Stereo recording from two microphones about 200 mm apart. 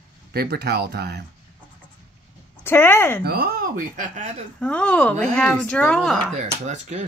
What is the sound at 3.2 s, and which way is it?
Speech, 50° right (ahead or behind).